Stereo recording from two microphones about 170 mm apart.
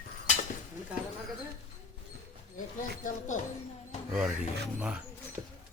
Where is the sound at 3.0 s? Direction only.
50° left (ahead or behind).